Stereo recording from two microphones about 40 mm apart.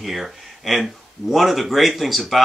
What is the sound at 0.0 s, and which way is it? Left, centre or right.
Speech, centre.